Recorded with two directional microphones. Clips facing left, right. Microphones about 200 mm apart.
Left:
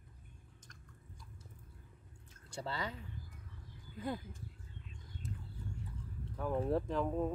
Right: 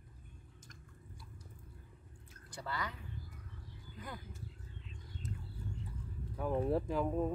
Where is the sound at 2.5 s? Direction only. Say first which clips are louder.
Left 1 dB; 25° left (ahead or behind).